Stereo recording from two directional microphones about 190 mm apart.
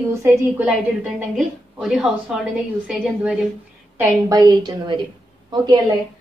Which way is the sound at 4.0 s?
20° right (ahead or behind).